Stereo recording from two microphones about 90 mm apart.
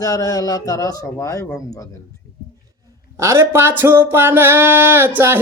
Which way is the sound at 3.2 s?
30° right (ahead or behind).